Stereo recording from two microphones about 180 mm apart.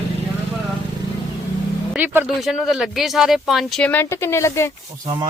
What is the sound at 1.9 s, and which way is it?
Speech, 5° right (ahead or behind).